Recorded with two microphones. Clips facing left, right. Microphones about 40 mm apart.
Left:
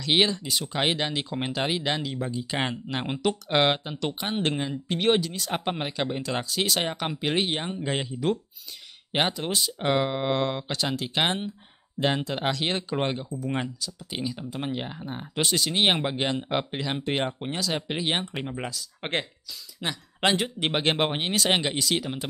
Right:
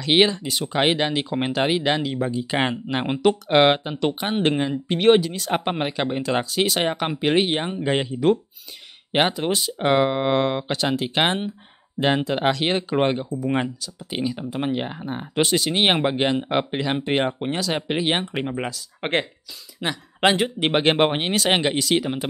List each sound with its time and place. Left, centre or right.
0.0 s speech: centre